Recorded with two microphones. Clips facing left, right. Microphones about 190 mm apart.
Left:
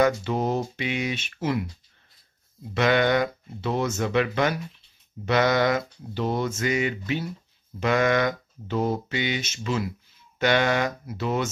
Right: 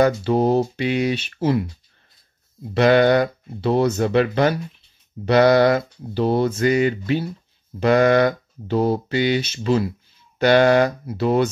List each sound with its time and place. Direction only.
0.0 s speech: 35° right (ahead or behind)
2.7 s speech: 35° right (ahead or behind)